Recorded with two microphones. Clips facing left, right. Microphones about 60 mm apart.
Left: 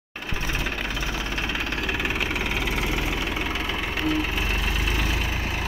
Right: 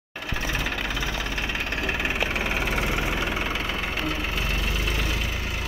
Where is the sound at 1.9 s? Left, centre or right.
Centre.